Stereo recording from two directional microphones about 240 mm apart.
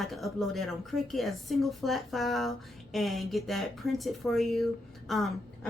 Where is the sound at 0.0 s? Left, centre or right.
Centre.